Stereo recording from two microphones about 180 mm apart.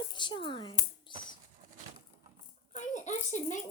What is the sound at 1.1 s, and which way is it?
Bird flight, 25° left (ahead or behind).